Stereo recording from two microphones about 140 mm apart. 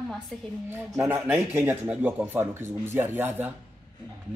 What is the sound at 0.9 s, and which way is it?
Speech, 10° right (ahead or behind).